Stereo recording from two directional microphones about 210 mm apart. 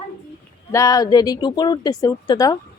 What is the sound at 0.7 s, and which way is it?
Speech, 15° left (ahead or behind).